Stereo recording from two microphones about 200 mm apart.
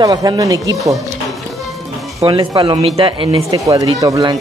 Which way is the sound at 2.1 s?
25° right (ahead or behind).